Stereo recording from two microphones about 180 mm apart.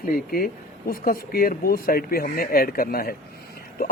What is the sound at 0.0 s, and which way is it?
A man's voice, 55° left (ahead or behind).